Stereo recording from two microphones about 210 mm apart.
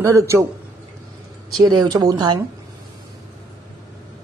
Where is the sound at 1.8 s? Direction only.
20° right (ahead or behind).